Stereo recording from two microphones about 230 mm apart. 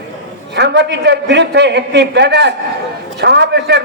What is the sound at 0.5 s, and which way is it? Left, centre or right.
A man's voice, right.